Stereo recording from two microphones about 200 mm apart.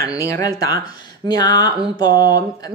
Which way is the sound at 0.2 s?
15° left (ahead or behind).